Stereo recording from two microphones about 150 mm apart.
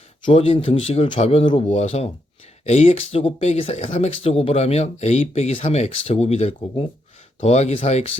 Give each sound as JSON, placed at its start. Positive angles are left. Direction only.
{"t": 0.3, "sound": "speech", "side_deg": 40}